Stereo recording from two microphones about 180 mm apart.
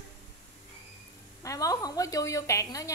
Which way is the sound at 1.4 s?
20° left (ahead or behind).